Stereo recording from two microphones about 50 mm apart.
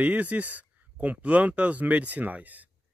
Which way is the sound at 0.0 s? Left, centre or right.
Right.